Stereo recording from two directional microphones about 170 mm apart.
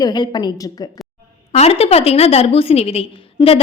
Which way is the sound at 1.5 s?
35° left (ahead or behind).